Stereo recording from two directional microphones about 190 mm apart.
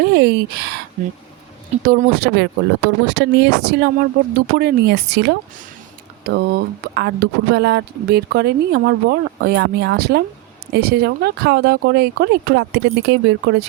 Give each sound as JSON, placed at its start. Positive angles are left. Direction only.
{"t": 0.0, "sound": "speech", "side_deg": -55}
{"t": 1.8, "sound": "speech", "side_deg": -50}